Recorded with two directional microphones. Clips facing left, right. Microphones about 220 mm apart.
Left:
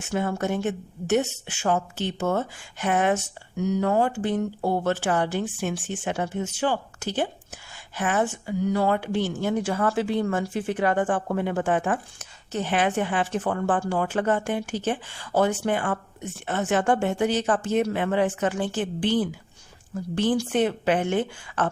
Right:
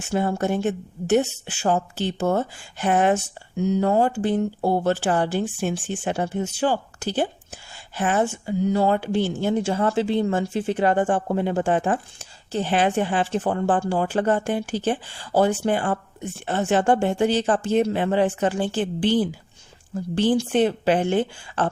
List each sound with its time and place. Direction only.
0.0 s a woman's voice: 35° right (ahead or behind)